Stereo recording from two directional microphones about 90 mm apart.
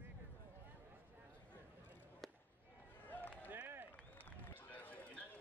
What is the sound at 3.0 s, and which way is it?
Run, 20° left (ahead or behind).